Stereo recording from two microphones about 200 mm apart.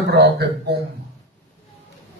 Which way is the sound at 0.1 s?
55° right (ahead or behind).